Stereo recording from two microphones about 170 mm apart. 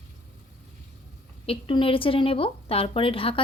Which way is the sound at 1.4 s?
30° left (ahead or behind).